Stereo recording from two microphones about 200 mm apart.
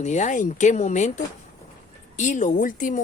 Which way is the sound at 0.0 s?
35° left (ahead or behind).